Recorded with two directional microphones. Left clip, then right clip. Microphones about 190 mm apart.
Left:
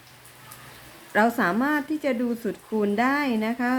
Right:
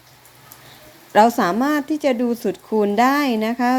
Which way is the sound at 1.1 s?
25° right (ahead or behind).